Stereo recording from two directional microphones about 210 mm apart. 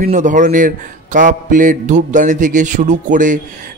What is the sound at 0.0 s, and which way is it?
A man's voice, 35° right (ahead or behind).